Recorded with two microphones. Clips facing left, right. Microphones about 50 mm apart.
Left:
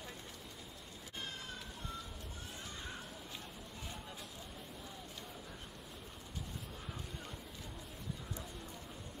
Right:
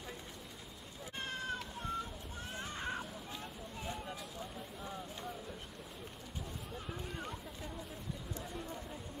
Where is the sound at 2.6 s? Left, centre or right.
Right.